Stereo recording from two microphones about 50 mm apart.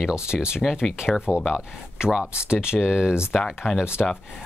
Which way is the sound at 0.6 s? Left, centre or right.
Centre.